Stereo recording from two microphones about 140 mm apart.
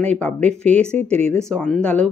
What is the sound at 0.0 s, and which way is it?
Speech, 10° left (ahead or behind).